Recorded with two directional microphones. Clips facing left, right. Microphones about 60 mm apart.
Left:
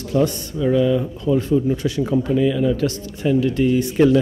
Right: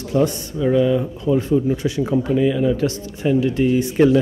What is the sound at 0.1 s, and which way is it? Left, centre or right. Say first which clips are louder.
Speech: even; right.